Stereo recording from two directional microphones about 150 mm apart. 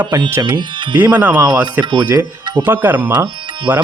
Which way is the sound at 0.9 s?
10° right (ahead or behind).